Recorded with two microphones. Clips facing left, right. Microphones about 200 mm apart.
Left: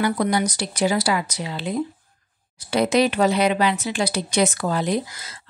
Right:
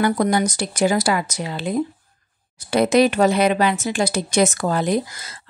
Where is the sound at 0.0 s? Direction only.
45° right (ahead or behind).